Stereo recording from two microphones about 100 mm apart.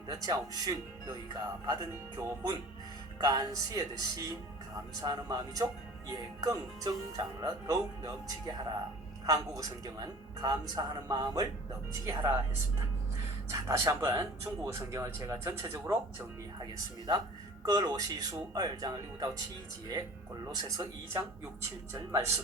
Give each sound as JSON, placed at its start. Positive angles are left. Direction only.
{"t": 0.1, "sound": "speech", "side_deg": -40}
{"t": 9.6, "sound": "speech", "side_deg": -40}
{"t": 12.0, "sound": "speech", "side_deg": -25}
{"t": 13.5, "sound": "speech", "side_deg": -30}
{"t": 16.6, "sound": "speech", "side_deg": -45}
{"t": 20.5, "sound": "speech", "side_deg": -40}